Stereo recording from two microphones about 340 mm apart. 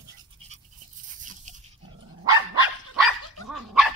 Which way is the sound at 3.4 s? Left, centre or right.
Centre.